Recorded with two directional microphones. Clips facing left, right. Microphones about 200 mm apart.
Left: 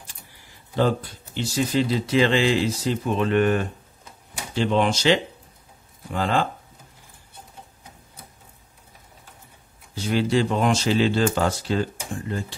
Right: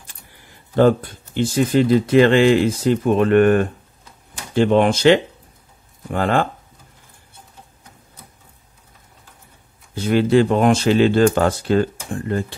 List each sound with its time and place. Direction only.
0.7 s speech: 55° right (ahead or behind)
9.9 s speech: 55° right (ahead or behind)